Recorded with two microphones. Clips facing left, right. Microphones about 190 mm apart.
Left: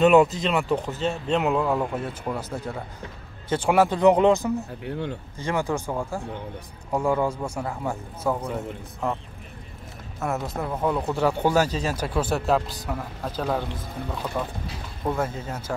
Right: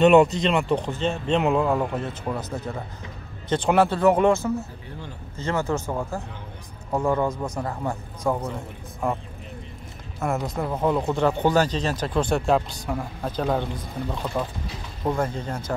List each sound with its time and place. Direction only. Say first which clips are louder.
0.0 s a man's voice: right 1 dB; centre (ahead or behind)
4.8 s speech: left 9 dB; 65° left (ahead or behind)
5.4 s a man's voice: right 1 dB; 15° left (ahead or behind)
7.0 s a man's voice: even; 10° left (ahead or behind)
10.2 s a man's voice: right 2 dB; centre (ahead or behind)